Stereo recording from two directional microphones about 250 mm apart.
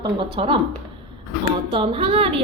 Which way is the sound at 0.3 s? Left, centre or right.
Right.